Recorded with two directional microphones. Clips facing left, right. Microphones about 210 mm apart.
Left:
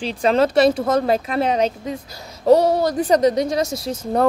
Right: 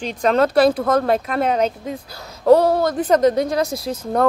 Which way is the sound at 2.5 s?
50° right (ahead or behind).